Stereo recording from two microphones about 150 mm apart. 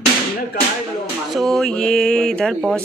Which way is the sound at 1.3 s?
Centre (ahead or behind).